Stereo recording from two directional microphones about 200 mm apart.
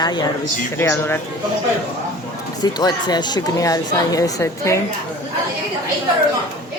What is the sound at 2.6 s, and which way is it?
Speech, 20° left (ahead or behind).